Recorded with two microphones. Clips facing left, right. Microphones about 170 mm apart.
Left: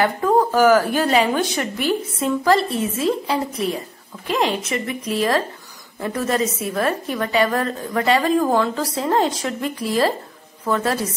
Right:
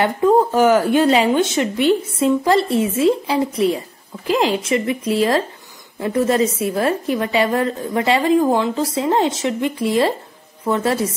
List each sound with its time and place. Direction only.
0.0 s a woman's voice: 25° right (ahead or behind)